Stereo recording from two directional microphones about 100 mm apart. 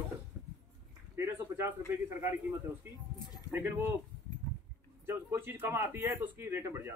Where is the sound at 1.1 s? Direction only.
25° right (ahead or behind).